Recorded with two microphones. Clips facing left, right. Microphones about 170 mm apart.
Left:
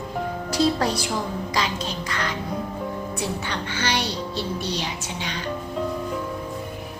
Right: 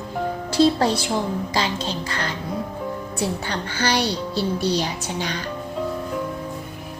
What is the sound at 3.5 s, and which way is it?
A woman's voice, 35° right (ahead or behind).